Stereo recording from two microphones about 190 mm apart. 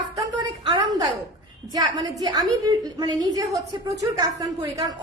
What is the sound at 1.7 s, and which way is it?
A woman's voice, 20° right (ahead or behind).